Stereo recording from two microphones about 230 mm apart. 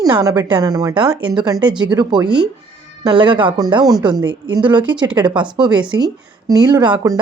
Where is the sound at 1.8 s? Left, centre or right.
Centre.